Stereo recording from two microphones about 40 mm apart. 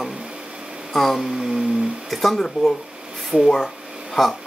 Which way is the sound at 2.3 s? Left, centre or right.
Centre.